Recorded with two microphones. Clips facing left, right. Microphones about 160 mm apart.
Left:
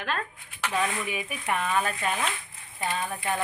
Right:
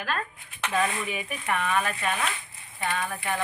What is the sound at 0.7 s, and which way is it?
Speech, 10° left (ahead or behind).